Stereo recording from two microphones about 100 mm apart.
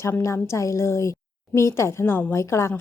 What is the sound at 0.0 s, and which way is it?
Speech, 30° left (ahead or behind).